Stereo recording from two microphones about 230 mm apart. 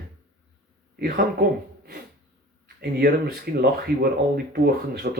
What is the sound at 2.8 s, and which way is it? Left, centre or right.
Speech, right.